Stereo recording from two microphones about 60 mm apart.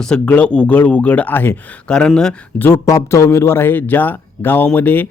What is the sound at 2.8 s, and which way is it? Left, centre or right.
A man's voice, left.